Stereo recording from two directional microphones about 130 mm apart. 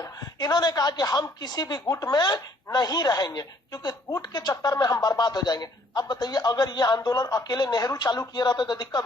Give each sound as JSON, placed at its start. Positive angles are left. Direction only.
{"t": 0.0, "sound": "a woman's voice", "side_deg": 30}